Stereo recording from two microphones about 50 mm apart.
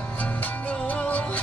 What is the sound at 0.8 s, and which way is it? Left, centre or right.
Music, left.